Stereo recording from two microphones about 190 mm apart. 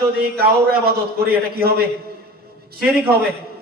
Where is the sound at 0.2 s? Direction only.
55° right (ahead or behind).